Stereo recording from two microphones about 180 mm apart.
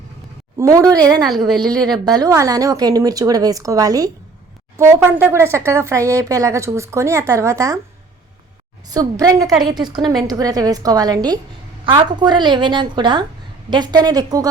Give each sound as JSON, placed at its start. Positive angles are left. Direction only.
{"t": 0.5, "sound": "a woman's voice", "side_deg": -20}
{"t": 8.9, "sound": "a woman's voice", "side_deg": -20}